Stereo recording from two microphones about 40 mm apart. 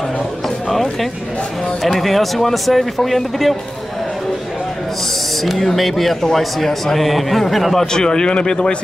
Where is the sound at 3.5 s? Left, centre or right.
Centre.